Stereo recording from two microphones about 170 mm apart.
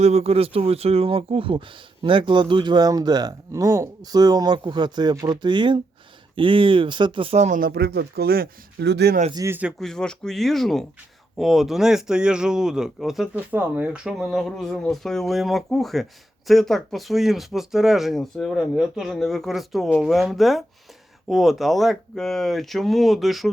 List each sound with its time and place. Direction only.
0.0 s speech: 40° right (ahead or behind); by 9.1 s 80° right
9.3 s speech: 15° right (ahead or behind)
9.8 s speech: 5° left (ahead or behind)